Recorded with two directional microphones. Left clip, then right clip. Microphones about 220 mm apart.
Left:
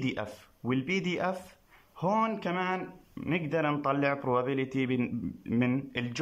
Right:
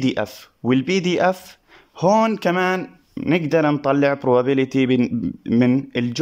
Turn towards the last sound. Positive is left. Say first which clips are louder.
# right 12 dB
turn(degrees=-35)  # may be behind; listen again after turning